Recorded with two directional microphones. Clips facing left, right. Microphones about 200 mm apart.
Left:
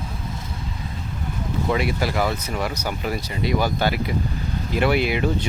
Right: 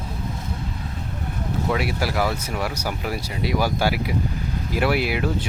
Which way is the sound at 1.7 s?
5° right (ahead or behind).